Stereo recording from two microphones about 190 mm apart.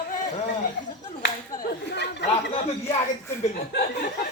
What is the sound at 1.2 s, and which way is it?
Clapping, 60° left (ahead or behind).